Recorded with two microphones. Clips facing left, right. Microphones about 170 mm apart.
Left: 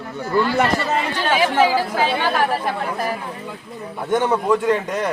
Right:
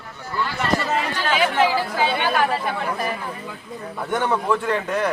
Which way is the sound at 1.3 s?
30° left (ahead or behind).